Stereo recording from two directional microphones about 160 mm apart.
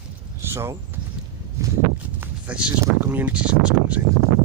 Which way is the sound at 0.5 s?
15° right (ahead or behind).